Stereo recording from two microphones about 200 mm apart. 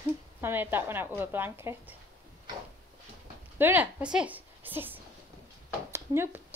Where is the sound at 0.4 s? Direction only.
10° right (ahead or behind).